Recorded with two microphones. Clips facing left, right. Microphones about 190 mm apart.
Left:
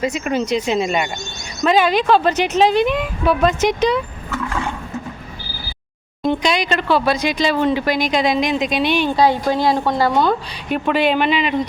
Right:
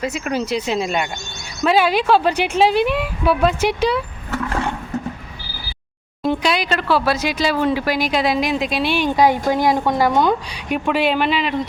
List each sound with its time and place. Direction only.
0.0 s speech: 5° right (ahead or behind)
6.2 s speech: 5° right (ahead or behind)
9.0 s speech: 15° right (ahead or behind)
10.8 s speech: 5° right (ahead or behind)